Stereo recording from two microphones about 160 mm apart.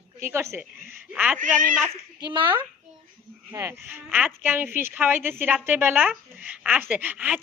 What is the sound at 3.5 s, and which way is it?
A woman's voice, 15° right (ahead or behind).